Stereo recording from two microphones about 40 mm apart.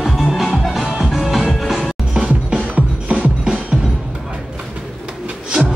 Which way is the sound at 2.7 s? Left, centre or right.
Right.